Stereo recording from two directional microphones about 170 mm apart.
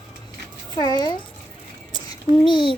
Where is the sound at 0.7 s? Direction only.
25° left (ahead or behind).